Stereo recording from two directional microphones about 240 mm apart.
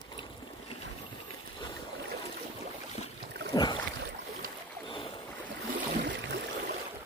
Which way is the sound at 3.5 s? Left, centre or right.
Centre.